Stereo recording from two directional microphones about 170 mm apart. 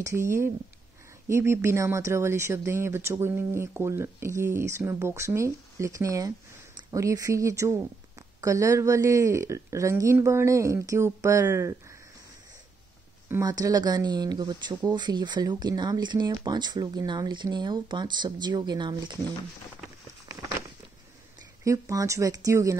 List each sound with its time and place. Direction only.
0.0 s speech: 15° right (ahead or behind)
13.3 s speech: 20° right (ahead or behind)
21.6 s speech: 20° right (ahead or behind)